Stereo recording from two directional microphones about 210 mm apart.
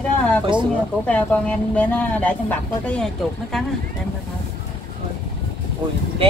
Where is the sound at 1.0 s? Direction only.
5° left (ahead or behind).